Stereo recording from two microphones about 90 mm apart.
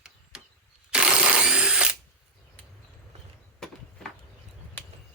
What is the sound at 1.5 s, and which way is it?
Ratchet, 10° right (ahead or behind).